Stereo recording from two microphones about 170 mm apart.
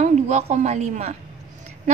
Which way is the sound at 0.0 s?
40° right (ahead or behind).